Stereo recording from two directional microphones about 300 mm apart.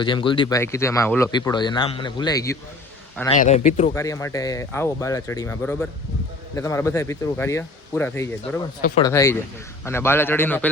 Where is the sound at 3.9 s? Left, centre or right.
Centre.